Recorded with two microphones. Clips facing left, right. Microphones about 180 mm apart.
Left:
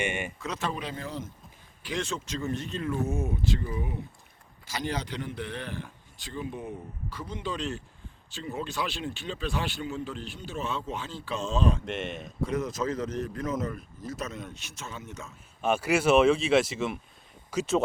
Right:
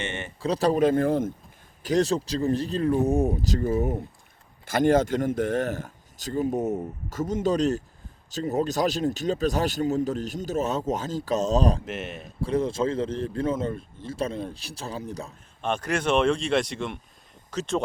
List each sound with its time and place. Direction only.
0.0 s speech: 10° left (ahead or behind)
0.3 s a man's voice: 35° right (ahead or behind); by 1.3 s 50° right (ahead or behind)
1.8 s a man's voice: 40° right (ahead or behind)
11.9 s speech: centre (ahead or behind)
12.4 s speech: 30° right (ahead or behind)
15.6 s speech: 5° left (ahead or behind)